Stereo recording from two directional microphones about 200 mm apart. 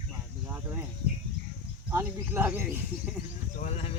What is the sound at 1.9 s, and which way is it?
Speech, 10° right (ahead or behind).